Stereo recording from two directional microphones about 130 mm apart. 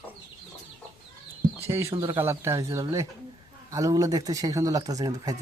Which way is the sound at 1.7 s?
20° right (ahead or behind).